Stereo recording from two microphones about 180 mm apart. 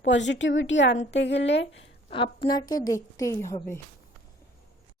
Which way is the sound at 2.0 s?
30° left (ahead or behind).